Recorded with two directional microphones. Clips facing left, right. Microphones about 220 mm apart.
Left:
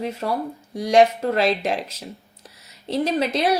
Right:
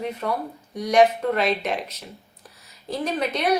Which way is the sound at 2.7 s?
75° left (ahead or behind).